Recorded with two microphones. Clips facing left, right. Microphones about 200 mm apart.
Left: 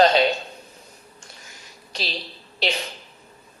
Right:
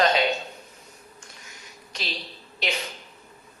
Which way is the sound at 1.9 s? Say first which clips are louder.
Left 4 dB; 30° left (ahead or behind).